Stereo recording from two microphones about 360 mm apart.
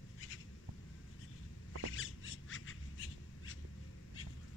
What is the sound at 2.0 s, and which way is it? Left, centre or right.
Squawk, left.